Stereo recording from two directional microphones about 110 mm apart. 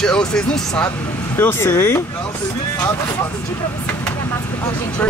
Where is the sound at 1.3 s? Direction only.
20° left (ahead or behind).